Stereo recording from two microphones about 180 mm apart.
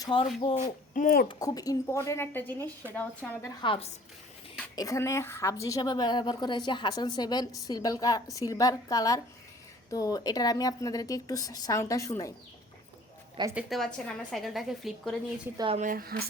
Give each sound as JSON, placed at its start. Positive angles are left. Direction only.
{"t": 0.0, "sound": "speech", "side_deg": 25}
{"t": 0.6, "sound": "speech", "side_deg": 50}
{"t": 1.3, "sound": "a woman's voice", "side_deg": 20}
{"t": 3.6, "sound": "a woman's voice", "side_deg": 30}
{"t": 4.7, "sound": "a woman's voice", "side_deg": 20}
{"t": 13.5, "sound": "a woman's voice", "side_deg": -5}
{"t": 15.5, "sound": "speech", "side_deg": -30}
{"t": 15.8, "sound": "speech", "side_deg": -50}